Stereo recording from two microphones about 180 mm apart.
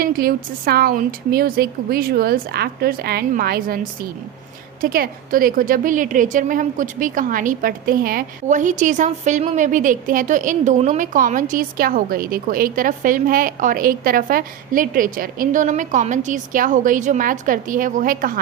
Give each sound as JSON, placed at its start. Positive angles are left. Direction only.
{"t": 0.0, "sound": "speech", "side_deg": -55}
{"t": 4.8, "sound": "a woman's voice", "side_deg": -50}